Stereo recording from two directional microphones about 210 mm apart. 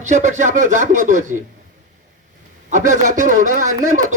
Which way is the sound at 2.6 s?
35° right (ahead or behind).